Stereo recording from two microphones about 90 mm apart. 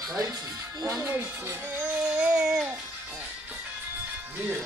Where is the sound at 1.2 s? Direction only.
15° right (ahead or behind).